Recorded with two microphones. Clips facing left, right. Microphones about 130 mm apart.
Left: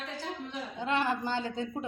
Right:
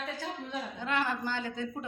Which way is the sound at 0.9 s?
25° left (ahead or behind).